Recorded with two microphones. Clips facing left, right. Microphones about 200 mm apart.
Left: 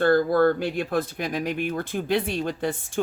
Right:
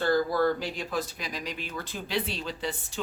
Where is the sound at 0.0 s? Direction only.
55° left (ahead or behind).